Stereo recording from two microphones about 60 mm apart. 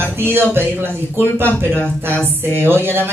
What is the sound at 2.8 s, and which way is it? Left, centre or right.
Speech, right.